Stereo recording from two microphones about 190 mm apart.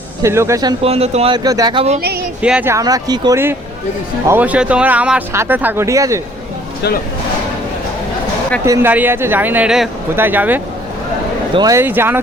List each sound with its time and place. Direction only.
0.2 s speech: 15° right (ahead or behind)
0.9 s speech: 35° right (ahead or behind)
1.5 s speech: 20° right (ahead or behind)
2.4 s speech: 5° right (ahead or behind)
8.6 s speech: 15° right (ahead or behind)